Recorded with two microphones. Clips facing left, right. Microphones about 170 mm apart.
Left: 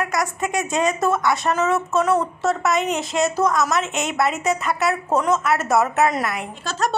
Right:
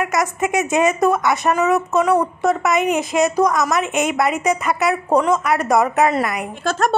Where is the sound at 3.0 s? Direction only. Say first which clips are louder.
Right 4 dB; centre (ahead or behind).